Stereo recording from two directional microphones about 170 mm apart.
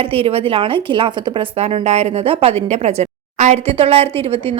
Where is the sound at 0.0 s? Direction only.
35° right (ahead or behind).